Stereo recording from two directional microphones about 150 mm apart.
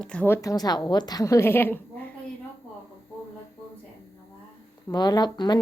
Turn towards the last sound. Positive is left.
turn(degrees=30)  # may be behind; listen again after turning